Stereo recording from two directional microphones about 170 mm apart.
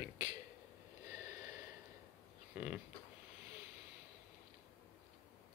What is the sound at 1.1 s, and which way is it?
Snort, 20° right (ahead or behind).